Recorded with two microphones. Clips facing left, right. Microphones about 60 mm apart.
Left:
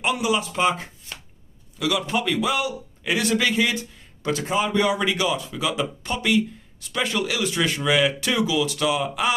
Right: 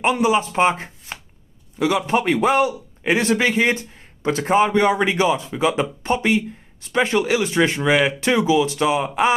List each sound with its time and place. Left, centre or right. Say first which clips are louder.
0.0 s speech: right 5 dB; right